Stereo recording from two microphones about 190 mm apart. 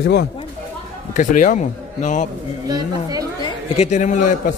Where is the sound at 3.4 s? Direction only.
35° left (ahead or behind).